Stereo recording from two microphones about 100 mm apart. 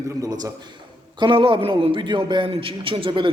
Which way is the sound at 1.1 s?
55° right (ahead or behind).